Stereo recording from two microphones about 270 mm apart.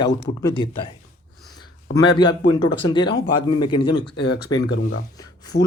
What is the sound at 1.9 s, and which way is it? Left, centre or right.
Speech, centre.